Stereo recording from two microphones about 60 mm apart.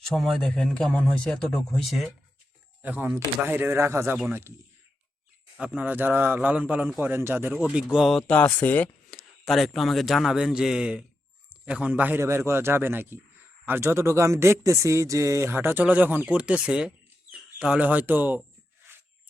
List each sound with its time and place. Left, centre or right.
0.0 s speech: centre
2.8 s speech: right
3.4 s speech: right
5.5 s speech: right
6.4 s speech: right
7.0 s speech: right
7.6 s a man's voice: centre
8.3 s speech: left
9.4 s a man's voice: centre; by 12.2 s right
12.2 s speech: right
15.8 s speech: right